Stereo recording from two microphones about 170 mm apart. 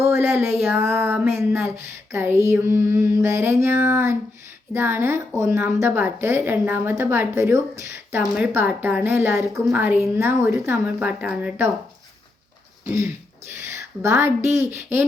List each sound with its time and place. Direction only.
0.0 s a sound: 15° right (ahead or behind)
1.4 s a woman's voice: 15° right (ahead or behind)
12.8 s a woman's voice: 20° right (ahead or behind)